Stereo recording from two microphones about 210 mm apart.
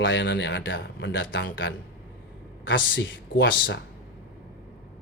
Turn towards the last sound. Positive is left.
turn(degrees=60)  # may be behind; listen again after turning